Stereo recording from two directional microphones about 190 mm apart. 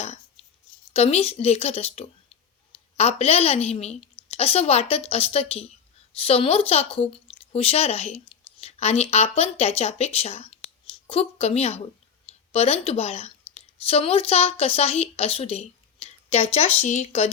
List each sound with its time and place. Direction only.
0.9 s a woman's voice: 30° left (ahead or behind)